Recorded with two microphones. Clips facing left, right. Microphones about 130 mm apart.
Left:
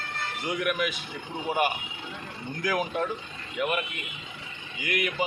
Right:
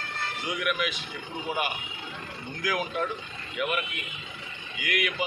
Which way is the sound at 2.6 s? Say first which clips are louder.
Left 2 dB; 45° left (ahead or behind).